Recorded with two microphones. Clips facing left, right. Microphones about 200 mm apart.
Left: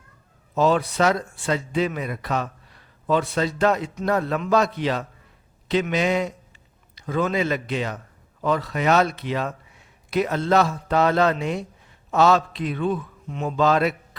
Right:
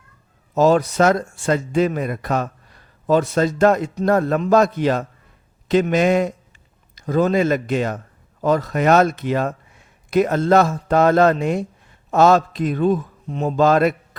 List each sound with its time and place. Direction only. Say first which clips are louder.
0.5 s a man's voice: right 5 dB; 45° right (ahead or behind)